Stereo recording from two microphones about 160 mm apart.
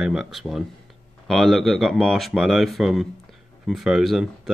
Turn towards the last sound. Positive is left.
turn(degrees=0)  # may be behind; listen again after turning